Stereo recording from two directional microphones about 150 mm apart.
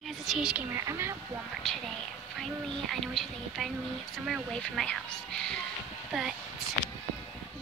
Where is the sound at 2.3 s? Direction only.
Centre (ahead or behind).